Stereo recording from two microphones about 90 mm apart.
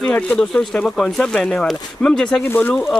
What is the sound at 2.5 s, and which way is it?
Speech, 20° left (ahead or behind).